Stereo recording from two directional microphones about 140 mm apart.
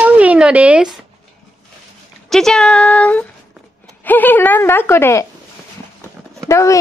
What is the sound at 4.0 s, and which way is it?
Speech, 15° left (ahead or behind).